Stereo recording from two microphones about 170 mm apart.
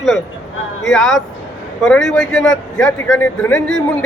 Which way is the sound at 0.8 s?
Centre (ahead or behind).